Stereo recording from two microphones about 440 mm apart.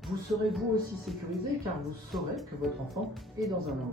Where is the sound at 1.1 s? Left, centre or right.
Centre.